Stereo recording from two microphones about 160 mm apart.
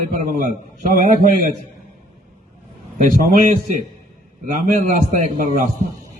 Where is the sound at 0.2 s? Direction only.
55° right (ahead or behind).